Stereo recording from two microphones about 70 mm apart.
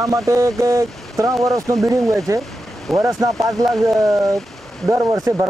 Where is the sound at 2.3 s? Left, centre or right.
Right.